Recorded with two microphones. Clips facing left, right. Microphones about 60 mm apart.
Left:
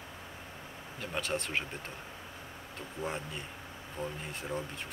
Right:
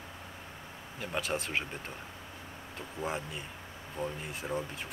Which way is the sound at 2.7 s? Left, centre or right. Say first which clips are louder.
Right 2 dB; centre.